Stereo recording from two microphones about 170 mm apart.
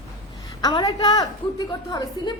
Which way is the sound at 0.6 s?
25° left (ahead or behind).